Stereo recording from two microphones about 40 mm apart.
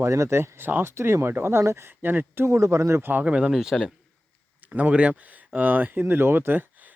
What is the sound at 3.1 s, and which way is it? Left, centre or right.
Speech, right.